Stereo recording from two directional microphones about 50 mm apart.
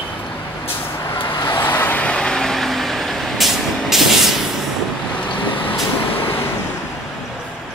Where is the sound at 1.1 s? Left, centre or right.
Left.